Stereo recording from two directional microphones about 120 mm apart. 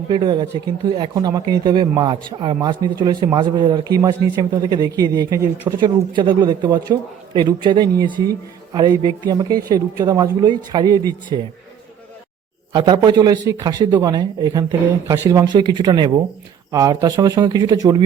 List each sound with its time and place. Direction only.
0.1 s a man's voice: 40° right (ahead or behind)
5.8 s a man's voice: 40° right (ahead or behind)
12.7 s a man's voice: 35° right (ahead or behind)